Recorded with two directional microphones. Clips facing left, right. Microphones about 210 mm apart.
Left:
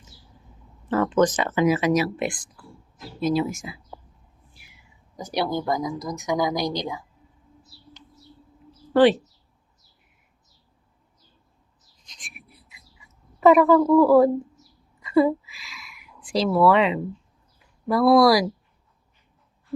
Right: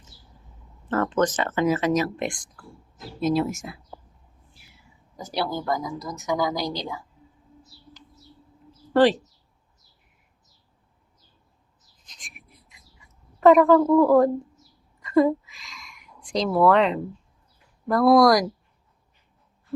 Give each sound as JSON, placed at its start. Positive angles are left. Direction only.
{"t": 0.9, "sound": "speech", "side_deg": 10}
{"t": 5.1, "sound": "speech", "side_deg": 15}
{"t": 8.9, "sound": "speech", "side_deg": 0}
{"t": 13.4, "sound": "speech", "side_deg": 5}
{"t": 15.0, "sound": "a sound", "side_deg": 5}
{"t": 17.8, "sound": "speech", "side_deg": 5}